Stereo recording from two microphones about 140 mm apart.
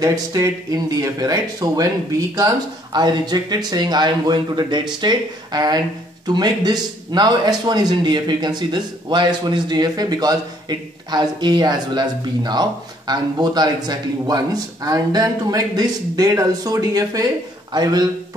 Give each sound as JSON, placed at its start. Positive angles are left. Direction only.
{"t": 0.0, "sound": "speech", "side_deg": -25}